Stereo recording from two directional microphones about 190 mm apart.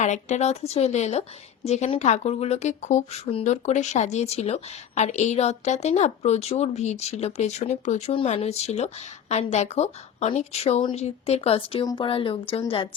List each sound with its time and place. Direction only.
0.0 s a woman's voice: 40° left (ahead or behind)